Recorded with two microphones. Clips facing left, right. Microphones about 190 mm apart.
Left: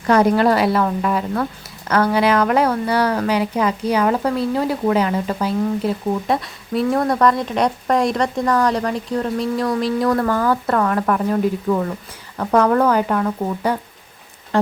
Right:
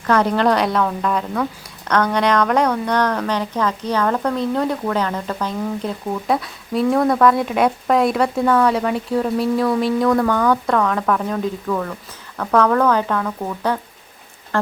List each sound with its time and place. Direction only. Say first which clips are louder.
0.1 s speech: left 2 dB; 10° left (ahead or behind)